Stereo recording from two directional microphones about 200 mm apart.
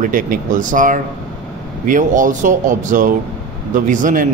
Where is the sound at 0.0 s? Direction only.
40° right (ahead or behind).